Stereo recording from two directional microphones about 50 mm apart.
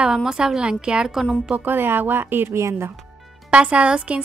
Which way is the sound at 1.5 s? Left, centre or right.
Right.